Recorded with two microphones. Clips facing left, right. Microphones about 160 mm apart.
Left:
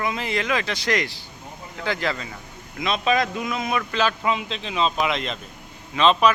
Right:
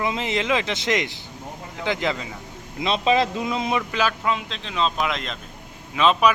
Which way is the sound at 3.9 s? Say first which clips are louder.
Left 1 dB; 10° right (ahead or behind).